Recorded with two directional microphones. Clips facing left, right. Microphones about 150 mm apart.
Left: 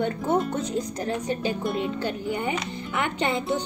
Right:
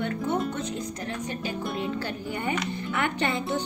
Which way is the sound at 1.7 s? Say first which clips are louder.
Left 3 dB; 20° left (ahead or behind).